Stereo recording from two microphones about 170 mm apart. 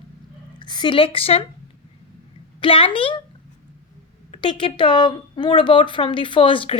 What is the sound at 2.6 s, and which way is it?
Speech, 30° left (ahead or behind).